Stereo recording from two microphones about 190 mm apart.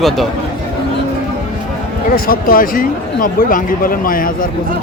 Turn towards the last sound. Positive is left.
turn(degrees=45)  # may be behind; listen again after turning